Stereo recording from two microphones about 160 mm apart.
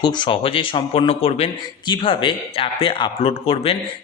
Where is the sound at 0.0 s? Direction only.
30° left (ahead or behind).